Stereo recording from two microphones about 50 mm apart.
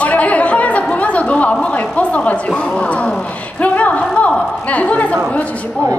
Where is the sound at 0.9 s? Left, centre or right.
Left.